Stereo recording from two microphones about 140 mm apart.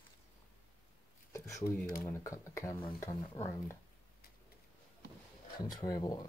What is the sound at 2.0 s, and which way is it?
Speech, 20° left (ahead or behind).